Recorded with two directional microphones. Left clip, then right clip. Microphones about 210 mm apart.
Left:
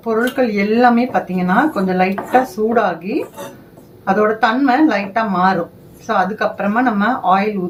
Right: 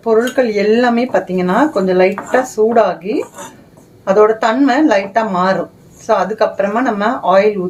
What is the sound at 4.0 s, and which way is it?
Speech, 50° right (ahead or behind).